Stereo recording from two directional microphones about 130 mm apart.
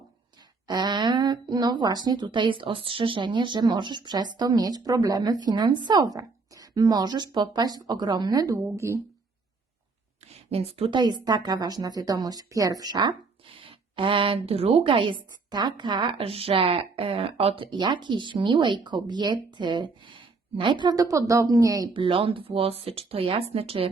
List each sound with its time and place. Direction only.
0.7 s a woman's voice: 35° right (ahead or behind)
10.2 s speech: 55° right (ahead or behind)
10.9 s a woman's voice: 35° right (ahead or behind)
21.9 s speech: 40° right (ahead or behind)